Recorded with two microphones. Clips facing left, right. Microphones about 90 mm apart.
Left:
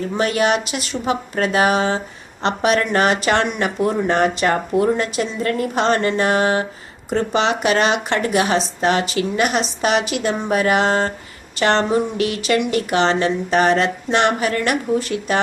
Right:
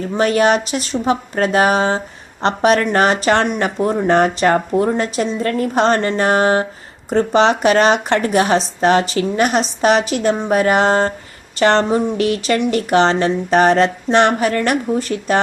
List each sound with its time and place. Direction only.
0.2 s speech: 35° right (ahead or behind)